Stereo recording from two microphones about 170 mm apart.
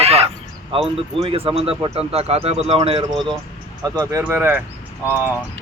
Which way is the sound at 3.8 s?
20° right (ahead or behind).